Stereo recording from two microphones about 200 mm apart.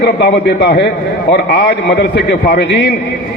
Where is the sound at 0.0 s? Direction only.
55° left (ahead or behind).